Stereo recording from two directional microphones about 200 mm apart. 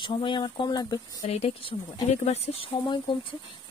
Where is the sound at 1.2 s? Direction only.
30° left (ahead or behind).